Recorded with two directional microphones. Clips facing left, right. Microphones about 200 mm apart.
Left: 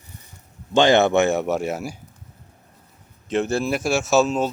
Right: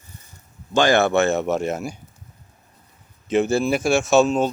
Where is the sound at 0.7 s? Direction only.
25° left (ahead or behind); by 2.0 s 5° left (ahead or behind).